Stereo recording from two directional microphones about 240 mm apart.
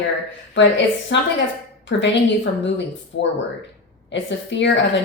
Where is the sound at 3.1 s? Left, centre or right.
Left.